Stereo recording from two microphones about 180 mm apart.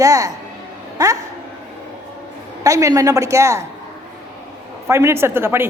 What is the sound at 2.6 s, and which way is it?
Speech, 20° right (ahead or behind).